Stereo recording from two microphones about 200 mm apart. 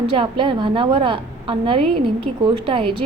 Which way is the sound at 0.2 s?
25° right (ahead or behind).